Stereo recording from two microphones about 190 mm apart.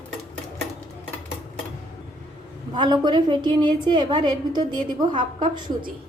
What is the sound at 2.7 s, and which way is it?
A woman's voice, 25° right (ahead or behind).